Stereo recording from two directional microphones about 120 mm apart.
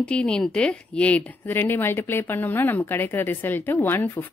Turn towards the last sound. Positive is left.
turn(degrees=15)  # may be behind; listen again after turning